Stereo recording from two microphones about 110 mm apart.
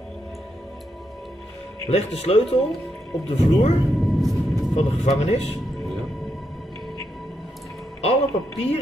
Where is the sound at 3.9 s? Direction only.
Centre (ahead or behind).